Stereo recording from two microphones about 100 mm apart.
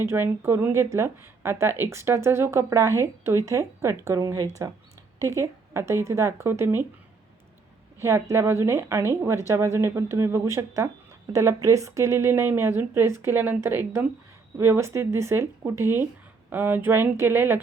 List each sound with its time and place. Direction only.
0.0 s speech: 25° right (ahead or behind)
7.9 s speech: 25° right (ahead or behind)